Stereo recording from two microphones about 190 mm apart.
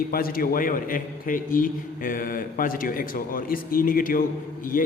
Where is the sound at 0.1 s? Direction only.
50° left (ahead or behind).